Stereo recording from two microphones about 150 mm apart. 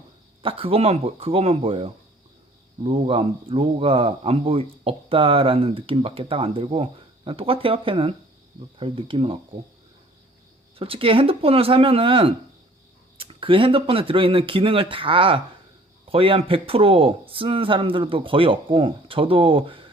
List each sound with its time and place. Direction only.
0.4 s speech: 40° right (ahead or behind)
10.8 s speech: 40° right (ahead or behind)